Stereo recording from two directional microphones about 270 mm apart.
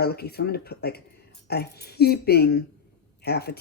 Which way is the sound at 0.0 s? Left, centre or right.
Left.